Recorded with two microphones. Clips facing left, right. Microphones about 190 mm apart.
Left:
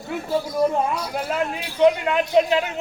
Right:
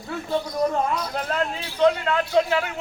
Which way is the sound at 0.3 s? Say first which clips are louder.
Left 2 dB; 5° left (ahead or behind).